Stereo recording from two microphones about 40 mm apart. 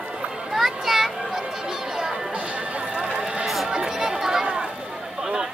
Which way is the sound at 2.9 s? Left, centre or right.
Right.